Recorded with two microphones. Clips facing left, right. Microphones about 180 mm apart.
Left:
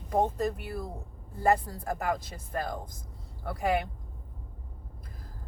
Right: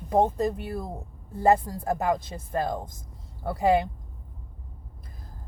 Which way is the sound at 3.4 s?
25° right (ahead or behind).